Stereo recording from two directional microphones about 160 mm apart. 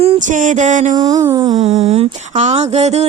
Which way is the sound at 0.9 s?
25° right (ahead or behind).